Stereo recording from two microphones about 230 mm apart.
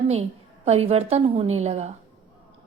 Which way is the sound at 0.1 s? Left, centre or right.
Right.